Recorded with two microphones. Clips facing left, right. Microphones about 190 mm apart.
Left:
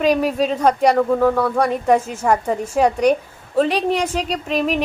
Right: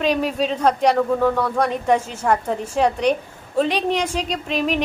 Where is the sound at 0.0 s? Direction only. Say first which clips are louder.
Left 3 dB; 10° left (ahead or behind).